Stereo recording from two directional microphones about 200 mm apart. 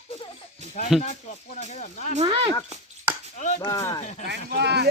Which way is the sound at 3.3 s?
40° left (ahead or behind).